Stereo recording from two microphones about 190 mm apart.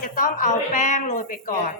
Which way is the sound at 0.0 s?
45° left (ahead or behind).